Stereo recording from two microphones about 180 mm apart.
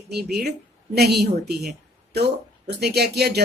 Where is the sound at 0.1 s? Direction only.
65° right (ahead or behind).